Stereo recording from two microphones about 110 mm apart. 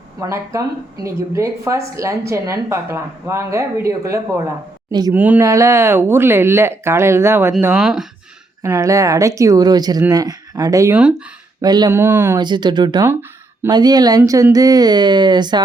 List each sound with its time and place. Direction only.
0.2 s a woman's voice: 30° right (ahead or behind)
4.9 s speech: 40° right (ahead or behind)
5.1 s speech: 15° right (ahead or behind)
5.5 s a woman's voice: 25° right (ahead or behind)
7.8 s speech: 5° right (ahead or behind)
8.6 s a woman's voice: 25° right (ahead or behind)
11.9 s a woman's voice: 20° right (ahead or behind)
12.4 s speech: 40° right (ahead or behind)